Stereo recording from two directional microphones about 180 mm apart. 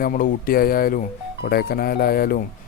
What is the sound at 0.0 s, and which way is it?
A man's voice, 50° left (ahead or behind).